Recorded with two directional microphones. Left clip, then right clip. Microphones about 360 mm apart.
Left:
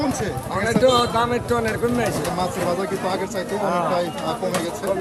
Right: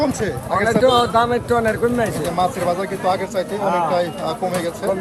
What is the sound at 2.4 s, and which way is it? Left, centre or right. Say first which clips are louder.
A man's voice: right 8 dB; centre.